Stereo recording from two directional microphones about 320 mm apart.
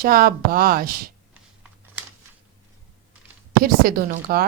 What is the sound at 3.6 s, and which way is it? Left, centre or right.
Speech, right.